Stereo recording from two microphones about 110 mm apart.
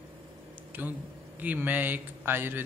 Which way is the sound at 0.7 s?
15° right (ahead or behind).